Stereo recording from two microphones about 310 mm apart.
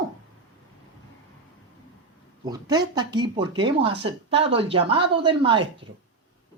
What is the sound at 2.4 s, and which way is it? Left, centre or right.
Speech, centre.